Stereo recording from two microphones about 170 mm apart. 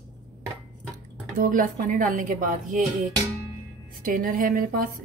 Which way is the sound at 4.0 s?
55° right (ahead or behind).